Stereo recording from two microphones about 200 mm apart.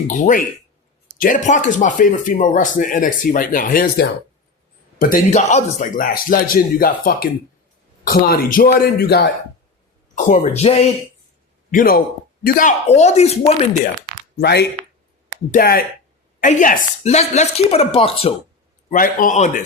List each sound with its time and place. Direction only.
0.1 s a man's voice: 40° left (ahead or behind)
10.2 s speech: 40° left (ahead or behind)
11.7 s speech: 45° left (ahead or behind)
14.3 s a man's voice: 55° left (ahead or behind); by 18.3 s 30° left (ahead or behind)
18.9 s a man's voice: 45° left (ahead or behind)